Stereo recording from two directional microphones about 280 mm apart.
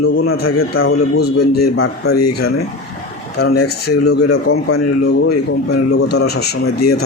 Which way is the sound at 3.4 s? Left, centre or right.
Left.